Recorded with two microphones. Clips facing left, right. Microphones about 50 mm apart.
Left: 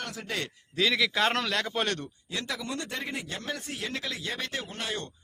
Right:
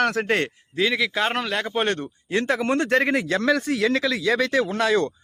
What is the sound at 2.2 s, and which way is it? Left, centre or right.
A man's voice, right.